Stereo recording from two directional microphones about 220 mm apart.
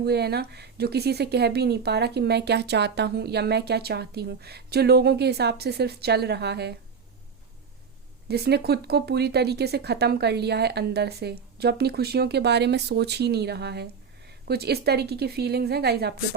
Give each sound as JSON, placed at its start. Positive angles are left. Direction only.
{"t": 0.0, "sound": "a woman's voice", "side_deg": -45}
{"t": 8.3, "sound": "a woman's voice", "side_deg": -45}